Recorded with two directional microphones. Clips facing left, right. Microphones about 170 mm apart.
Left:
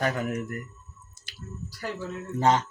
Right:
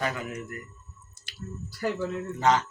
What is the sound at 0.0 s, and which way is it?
Speech, 50° left (ahead or behind).